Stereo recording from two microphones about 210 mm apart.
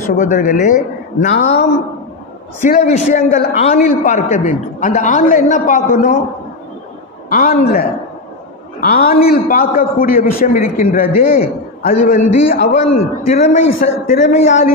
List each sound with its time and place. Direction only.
0.0 s a man's voice: 35° left (ahead or behind)
2.6 s a man's voice: 35° left (ahead or behind)
7.2 s a man's voice: 45° left (ahead or behind)
8.9 s a man's voice: 45° left (ahead or behind)
12.4 s a man's voice: 50° left (ahead or behind)
12.8 s a man's voice: 30° left (ahead or behind)
13.8 s a man's voice: 40° left (ahead or behind)